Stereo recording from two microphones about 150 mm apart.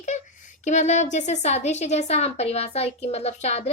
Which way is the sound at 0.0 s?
55° left (ahead or behind).